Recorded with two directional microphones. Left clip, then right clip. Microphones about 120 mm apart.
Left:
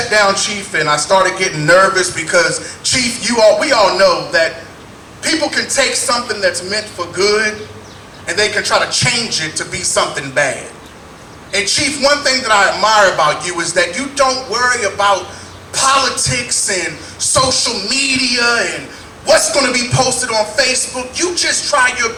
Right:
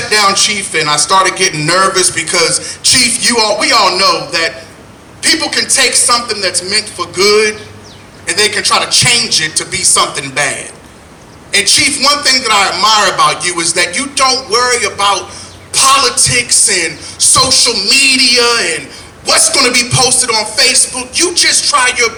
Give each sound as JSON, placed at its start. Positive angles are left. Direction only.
{"t": 0.2, "sound": "a man's voice", "side_deg": -25}